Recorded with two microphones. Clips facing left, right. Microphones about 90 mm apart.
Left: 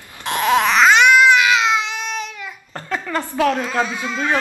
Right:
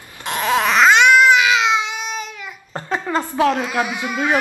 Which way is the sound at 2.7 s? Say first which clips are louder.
Right 2 dB; 20° right (ahead or behind).